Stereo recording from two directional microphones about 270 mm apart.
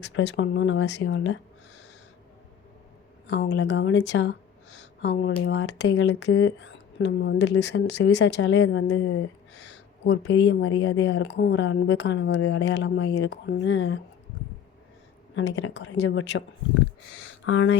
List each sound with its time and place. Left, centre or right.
0.0 s speech: left
3.2 s speech: left
15.4 s speech: left
17.2 s a sound: left